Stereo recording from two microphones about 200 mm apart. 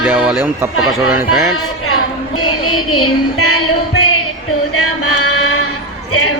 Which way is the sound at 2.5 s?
90° left.